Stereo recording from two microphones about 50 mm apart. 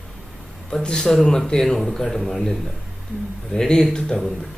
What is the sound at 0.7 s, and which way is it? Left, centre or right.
Speech, centre.